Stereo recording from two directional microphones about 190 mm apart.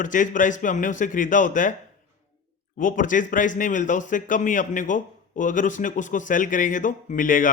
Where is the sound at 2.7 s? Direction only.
45° left (ahead or behind).